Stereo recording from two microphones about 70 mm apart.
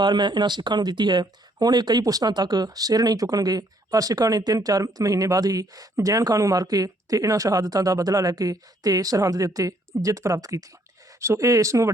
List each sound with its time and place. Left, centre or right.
0.0 s speech: right
11.2 s speech: right